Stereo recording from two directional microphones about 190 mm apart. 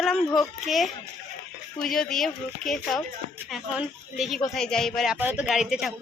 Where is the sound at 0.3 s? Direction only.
Centre (ahead or behind).